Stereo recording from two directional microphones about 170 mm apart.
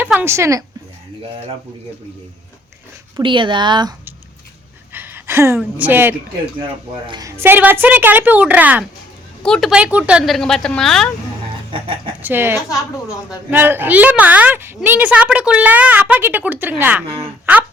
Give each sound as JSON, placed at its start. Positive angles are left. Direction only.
{"t": 0.0, "sound": "speech", "side_deg": -10}
{"t": 3.2, "sound": "speech", "side_deg": -30}
{"t": 4.9, "sound": "a sound", "side_deg": -10}
{"t": 5.5, "sound": "a woman's voice", "side_deg": -10}
{"t": 9.4, "sound": "speech", "side_deg": 0}
{"t": 12.2, "sound": "a woman's voice", "side_deg": -10}